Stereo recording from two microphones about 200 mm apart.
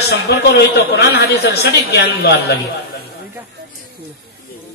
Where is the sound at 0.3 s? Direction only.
60° left (ahead or behind).